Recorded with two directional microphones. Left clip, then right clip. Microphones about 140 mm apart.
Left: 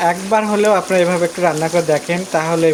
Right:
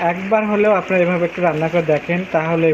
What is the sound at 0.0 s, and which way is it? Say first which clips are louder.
Speech: left 2 dB; 35° left (ahead or behind).